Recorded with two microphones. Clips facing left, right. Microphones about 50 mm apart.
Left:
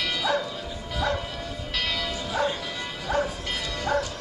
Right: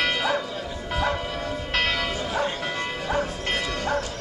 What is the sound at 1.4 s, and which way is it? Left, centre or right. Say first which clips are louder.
Church bell: right 6 dB; right.